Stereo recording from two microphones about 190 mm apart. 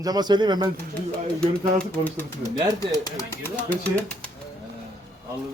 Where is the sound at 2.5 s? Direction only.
15° right (ahead or behind).